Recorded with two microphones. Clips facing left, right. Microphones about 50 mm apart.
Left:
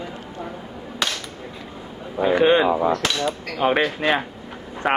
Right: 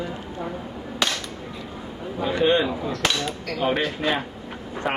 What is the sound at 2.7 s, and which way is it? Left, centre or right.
Hammer, left.